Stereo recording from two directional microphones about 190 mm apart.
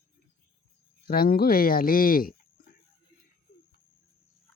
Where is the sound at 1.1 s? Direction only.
50° left (ahead or behind).